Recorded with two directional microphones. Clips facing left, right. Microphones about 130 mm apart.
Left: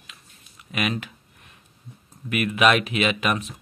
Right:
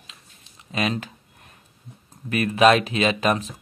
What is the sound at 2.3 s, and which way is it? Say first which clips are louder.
Speech: right 3 dB; 35° right (ahead or behind).